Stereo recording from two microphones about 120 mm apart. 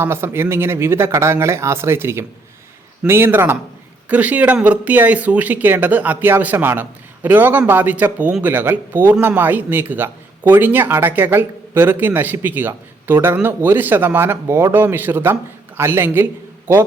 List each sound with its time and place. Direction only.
0.0 s a man's voice: 20° right (ahead or behind)